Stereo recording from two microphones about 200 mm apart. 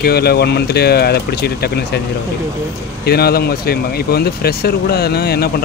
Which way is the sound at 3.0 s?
50° left (ahead or behind).